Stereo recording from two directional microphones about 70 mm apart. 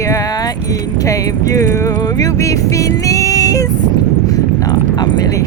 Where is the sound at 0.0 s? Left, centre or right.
Left.